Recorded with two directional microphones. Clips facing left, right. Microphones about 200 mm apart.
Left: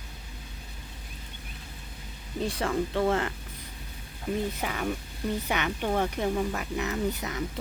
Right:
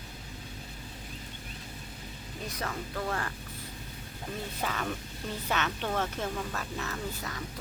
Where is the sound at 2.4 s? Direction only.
30° left (ahead or behind).